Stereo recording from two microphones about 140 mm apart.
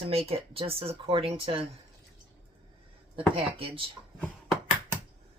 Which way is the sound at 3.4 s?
40° right (ahead or behind).